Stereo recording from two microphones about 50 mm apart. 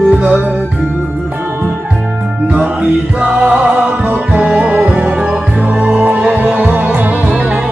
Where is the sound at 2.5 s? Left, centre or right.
Right.